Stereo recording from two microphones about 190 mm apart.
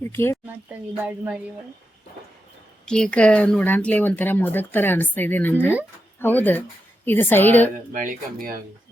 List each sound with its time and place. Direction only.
0.1 s speech: 10° left (ahead or behind)
0.4 s speech: 10° right (ahead or behind)
2.8 s a woman's voice: 5° left (ahead or behind)
7.9 s speech: 45° right (ahead or behind)